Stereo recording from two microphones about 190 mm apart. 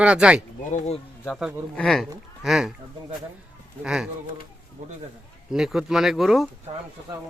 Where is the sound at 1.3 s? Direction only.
5° right (ahead or behind).